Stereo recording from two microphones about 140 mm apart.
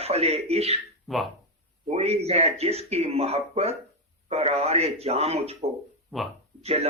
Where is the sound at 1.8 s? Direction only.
50° right (ahead or behind).